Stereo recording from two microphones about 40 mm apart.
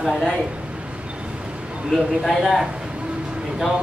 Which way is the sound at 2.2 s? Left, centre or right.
Centre.